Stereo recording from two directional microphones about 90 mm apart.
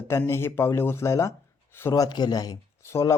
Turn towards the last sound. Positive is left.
turn(degrees=30)  # may be behind; listen again after turning